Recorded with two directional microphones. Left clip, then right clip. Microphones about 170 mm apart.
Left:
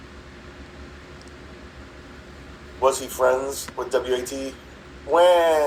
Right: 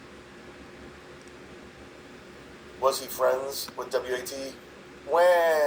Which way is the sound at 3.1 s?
50° left (ahead or behind).